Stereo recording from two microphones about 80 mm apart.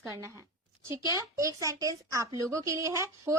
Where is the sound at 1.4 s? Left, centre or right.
Right.